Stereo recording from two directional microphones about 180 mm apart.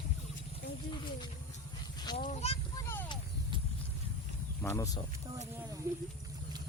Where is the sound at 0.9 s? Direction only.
25° left (ahead or behind).